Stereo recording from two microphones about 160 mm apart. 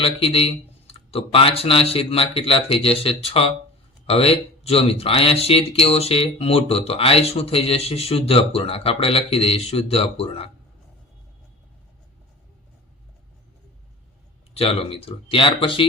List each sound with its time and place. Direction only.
0.0 s speech: 35° left (ahead or behind)
14.5 s speech: 35° left (ahead or behind)